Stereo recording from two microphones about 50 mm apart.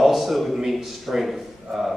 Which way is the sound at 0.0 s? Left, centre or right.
Centre.